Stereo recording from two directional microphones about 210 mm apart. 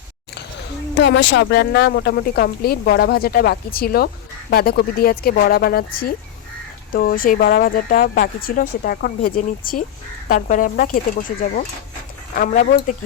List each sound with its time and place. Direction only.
0.9 s speech: 55° left (ahead or behind); by 13.0 s 35° left (ahead or behind)